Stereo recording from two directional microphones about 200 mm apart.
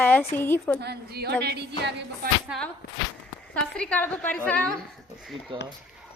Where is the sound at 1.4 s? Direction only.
55° right (ahead or behind).